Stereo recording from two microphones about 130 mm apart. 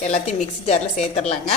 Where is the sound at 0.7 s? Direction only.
60° left (ahead or behind).